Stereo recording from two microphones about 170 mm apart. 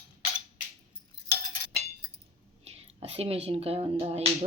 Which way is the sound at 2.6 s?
35° right (ahead or behind).